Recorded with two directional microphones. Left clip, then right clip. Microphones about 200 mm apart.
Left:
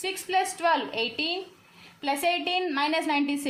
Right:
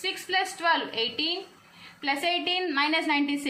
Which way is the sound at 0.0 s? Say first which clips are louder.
Left 1 dB; 50° left (ahead or behind).